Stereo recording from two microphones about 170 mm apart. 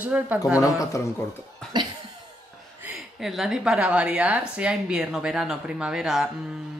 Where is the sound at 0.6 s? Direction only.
20° left (ahead or behind).